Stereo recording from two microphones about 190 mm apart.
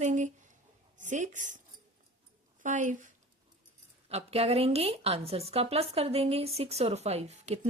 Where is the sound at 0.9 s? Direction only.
40° right (ahead or behind).